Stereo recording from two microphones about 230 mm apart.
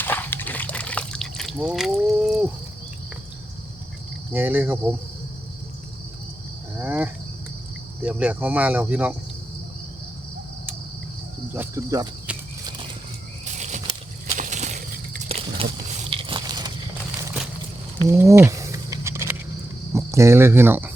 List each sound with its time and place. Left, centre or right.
0.0 s liquid: centre
4.3 s speech: centre
6.7 s cricket: centre
8.0 s speech: centre
11.5 s cricket: centre
13.4 s a sound: right
18.1 s a sound: centre
19.9 s cricket: centre